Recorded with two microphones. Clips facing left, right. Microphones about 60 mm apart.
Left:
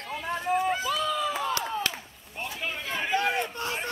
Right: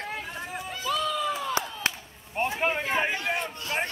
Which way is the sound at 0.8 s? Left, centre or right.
Centre.